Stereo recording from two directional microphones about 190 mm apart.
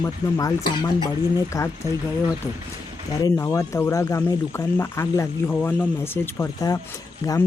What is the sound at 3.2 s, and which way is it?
Speech, 15° left (ahead or behind).